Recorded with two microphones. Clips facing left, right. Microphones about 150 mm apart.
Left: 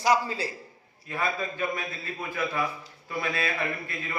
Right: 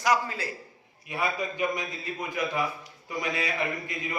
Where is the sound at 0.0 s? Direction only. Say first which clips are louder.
Left 2 dB; 30° left (ahead or behind).